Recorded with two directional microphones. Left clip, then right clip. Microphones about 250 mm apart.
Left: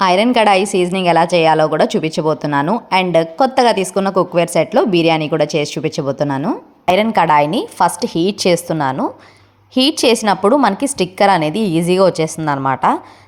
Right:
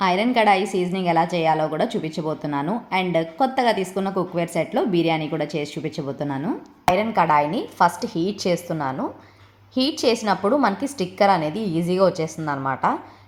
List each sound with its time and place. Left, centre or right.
0.0 s speech: left